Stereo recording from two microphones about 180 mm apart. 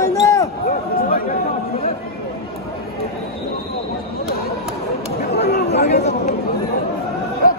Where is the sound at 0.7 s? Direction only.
55° left (ahead or behind).